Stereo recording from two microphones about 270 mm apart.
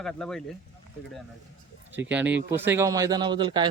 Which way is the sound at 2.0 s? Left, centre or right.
Centre.